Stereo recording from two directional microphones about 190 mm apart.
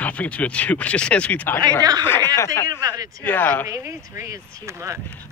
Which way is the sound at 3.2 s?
10° left (ahead or behind).